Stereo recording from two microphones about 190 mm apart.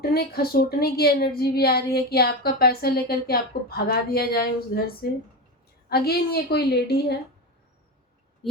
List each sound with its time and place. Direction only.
0.0 s a woman's voice: 55° left (ahead or behind)